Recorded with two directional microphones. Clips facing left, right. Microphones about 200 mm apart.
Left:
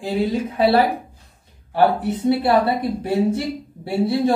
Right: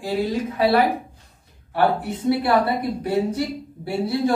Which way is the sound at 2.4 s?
25° left (ahead or behind).